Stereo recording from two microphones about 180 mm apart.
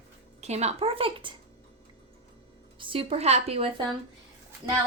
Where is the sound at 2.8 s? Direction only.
30° right (ahead or behind).